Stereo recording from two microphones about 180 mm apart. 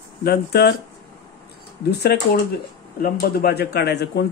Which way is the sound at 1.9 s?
65° left (ahead or behind).